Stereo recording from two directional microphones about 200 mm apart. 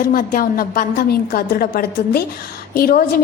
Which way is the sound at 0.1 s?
45° left (ahead or behind).